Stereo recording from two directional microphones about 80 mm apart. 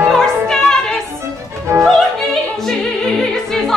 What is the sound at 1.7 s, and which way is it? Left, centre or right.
Music, right.